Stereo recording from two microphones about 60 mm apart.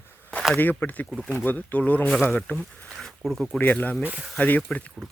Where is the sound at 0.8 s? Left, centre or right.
Left.